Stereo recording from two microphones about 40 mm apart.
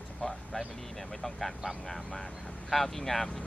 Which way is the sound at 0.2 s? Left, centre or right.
Centre.